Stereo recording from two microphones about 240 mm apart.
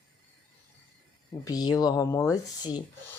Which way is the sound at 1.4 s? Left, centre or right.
Centre.